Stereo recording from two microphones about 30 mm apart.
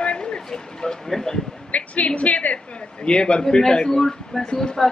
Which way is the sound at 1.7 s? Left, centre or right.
Left.